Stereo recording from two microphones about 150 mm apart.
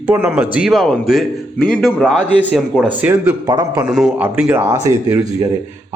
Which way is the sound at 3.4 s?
25° right (ahead or behind).